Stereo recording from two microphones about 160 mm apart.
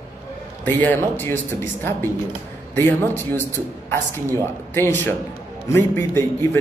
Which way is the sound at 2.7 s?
15° left (ahead or behind).